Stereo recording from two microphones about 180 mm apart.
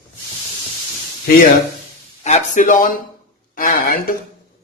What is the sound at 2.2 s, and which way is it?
Speech, 40° left (ahead or behind).